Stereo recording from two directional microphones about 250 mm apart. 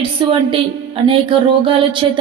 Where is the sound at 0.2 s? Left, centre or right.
Centre.